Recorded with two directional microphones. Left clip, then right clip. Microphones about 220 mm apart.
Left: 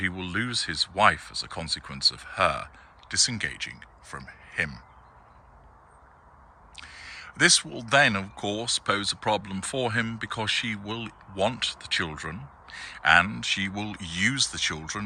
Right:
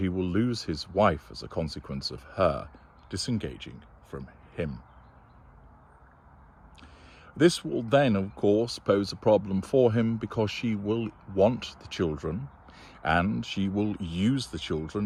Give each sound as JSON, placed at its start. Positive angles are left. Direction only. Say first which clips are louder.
{"t": 0.0, "sound": "speech", "louder": "even", "side_deg": -20}
{"t": 6.8, "sound": "speech", "louder": "left 12 dB", "side_deg": -10}